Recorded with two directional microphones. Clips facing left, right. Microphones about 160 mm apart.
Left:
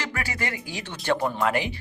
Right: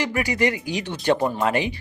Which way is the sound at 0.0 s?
15° right (ahead or behind).